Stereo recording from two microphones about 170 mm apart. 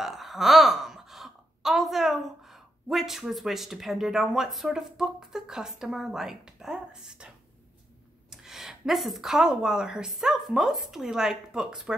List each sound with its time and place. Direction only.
0.0 s speech: centre (ahead or behind)
8.3 s speech: centre (ahead or behind)